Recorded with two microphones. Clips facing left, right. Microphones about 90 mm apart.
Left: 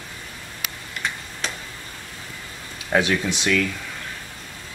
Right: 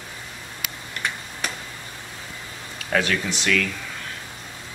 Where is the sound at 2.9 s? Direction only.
20° left (ahead or behind).